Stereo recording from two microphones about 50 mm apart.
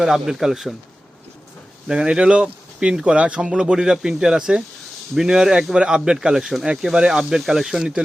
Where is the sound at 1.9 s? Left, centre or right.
Centre.